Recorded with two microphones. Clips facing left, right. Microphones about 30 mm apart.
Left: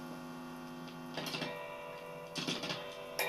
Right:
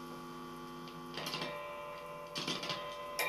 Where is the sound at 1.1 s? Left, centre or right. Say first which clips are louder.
Even; centre.